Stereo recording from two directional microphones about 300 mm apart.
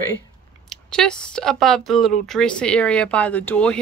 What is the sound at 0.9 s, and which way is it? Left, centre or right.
Speech, centre.